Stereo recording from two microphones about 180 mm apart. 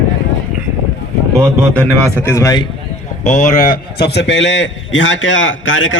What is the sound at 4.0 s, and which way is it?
A man's voice, 75° left (ahead or behind).